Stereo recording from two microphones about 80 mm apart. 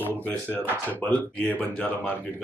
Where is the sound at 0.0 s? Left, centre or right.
Centre.